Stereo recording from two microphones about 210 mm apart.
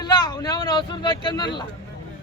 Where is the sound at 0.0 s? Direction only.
20° left (ahead or behind).